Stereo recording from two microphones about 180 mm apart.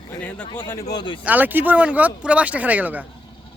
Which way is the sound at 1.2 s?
10° right (ahead or behind).